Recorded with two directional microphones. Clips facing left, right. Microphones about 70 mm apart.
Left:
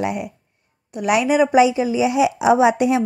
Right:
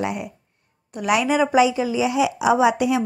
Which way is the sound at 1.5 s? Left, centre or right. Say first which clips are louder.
Left 3 dB; left.